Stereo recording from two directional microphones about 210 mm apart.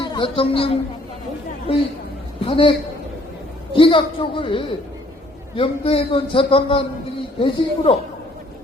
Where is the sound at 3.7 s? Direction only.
25° left (ahead or behind).